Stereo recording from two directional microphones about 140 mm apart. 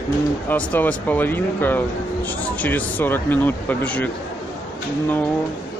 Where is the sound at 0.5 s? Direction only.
10° left (ahead or behind).